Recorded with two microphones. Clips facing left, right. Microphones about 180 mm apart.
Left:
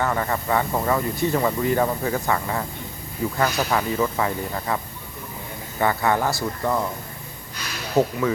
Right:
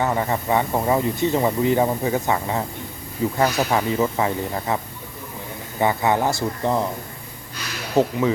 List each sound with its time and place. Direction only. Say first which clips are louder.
0.0 s speech: right 2 dB; 20° right (ahead or behind)
5.8 s speech: right 2 dB; 20° right (ahead or behind)
8.0 s speech: right 1 dB; 25° right (ahead or behind)